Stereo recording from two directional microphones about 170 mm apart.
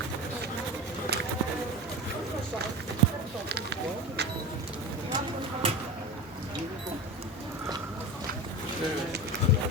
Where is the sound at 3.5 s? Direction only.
75° right (ahead or behind).